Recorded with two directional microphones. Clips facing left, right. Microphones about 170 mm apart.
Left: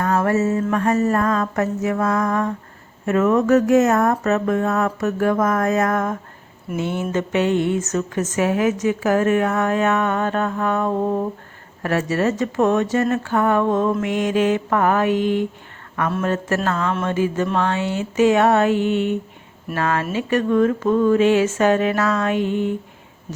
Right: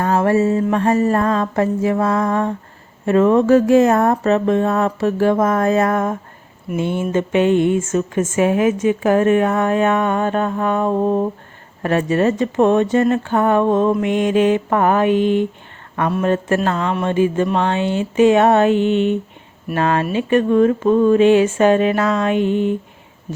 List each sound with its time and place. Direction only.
0.0 s speech: 30° right (ahead or behind)